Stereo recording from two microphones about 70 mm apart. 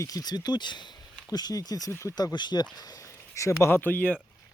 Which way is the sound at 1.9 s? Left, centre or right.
Left.